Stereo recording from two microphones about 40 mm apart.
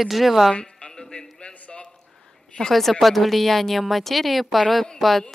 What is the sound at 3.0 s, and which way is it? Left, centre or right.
Speech, centre.